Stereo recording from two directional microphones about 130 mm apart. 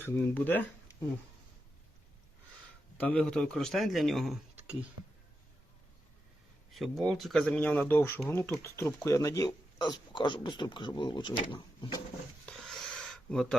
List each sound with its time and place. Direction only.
0.0 s speech: 15° left (ahead or behind)
3.0 s a man's voice: 10° left (ahead or behind)
6.7 s a man's voice: centre (ahead or behind)
7.6 s speech: 15° left (ahead or behind); by 11.9 s 35° left (ahead or behind)
12.5 s a sound: centre (ahead or behind)